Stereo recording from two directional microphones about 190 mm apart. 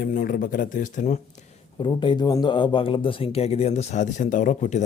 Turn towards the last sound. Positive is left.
turn(degrees=40)  # may be behind; listen again after turning